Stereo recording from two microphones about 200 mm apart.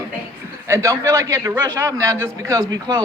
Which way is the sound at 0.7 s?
15° right (ahead or behind).